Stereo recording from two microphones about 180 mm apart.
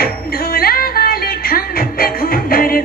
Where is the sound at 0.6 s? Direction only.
55° left (ahead or behind).